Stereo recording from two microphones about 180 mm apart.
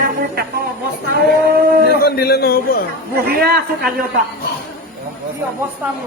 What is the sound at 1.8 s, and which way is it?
Speech, 60° left (ahead or behind).